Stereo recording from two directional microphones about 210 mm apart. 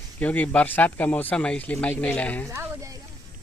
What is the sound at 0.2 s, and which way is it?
Speech, 5° left (ahead or behind).